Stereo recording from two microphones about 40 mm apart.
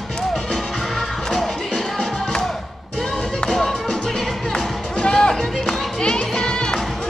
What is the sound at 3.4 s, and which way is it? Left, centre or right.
Music, centre.